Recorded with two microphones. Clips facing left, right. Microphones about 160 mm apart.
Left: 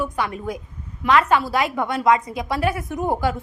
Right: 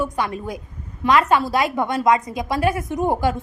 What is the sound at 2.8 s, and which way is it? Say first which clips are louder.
Speech: right 2 dB; 20° right (ahead or behind).